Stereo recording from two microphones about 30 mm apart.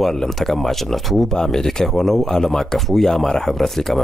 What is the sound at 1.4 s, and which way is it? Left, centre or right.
Speech, centre.